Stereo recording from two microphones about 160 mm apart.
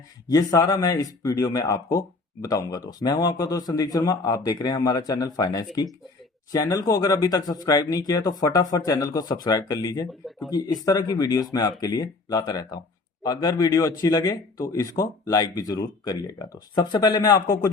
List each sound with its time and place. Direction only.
0.3 s speech: 25° left (ahead or behind)